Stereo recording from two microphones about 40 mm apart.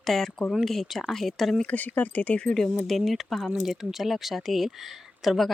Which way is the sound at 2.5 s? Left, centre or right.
Centre.